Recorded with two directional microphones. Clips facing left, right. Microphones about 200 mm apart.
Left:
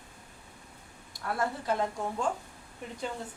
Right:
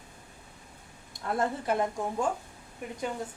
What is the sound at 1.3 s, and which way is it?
Speech, 20° right (ahead or behind).